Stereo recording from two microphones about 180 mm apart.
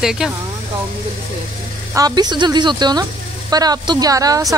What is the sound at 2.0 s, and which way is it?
Speech, 20° right (ahead or behind).